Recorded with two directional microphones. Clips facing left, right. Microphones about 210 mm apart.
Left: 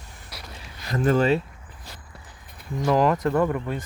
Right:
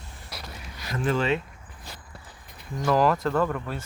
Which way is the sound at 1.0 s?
40° left (ahead or behind).